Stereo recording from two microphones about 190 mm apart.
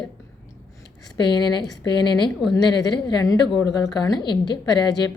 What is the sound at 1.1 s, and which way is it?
A woman's voice, 25° left (ahead or behind).